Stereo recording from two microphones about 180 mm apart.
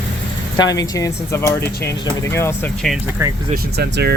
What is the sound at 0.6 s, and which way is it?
Speech, 20° left (ahead or behind).